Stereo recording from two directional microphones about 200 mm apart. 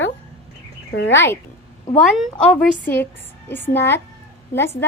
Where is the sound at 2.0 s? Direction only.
Centre (ahead or behind).